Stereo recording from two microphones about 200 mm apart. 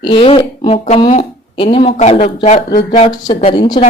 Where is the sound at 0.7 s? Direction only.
40° left (ahead or behind).